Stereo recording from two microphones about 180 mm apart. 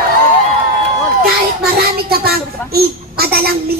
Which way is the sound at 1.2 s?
60° right (ahead or behind).